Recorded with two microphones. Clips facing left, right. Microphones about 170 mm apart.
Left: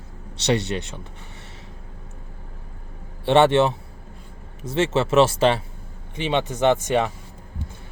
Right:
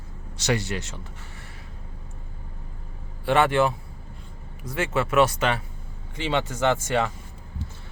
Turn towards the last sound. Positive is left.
turn(degrees=20)  # may be behind; listen again after turning